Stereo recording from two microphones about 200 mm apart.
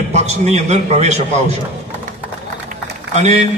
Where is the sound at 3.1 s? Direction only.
35° right (ahead or behind).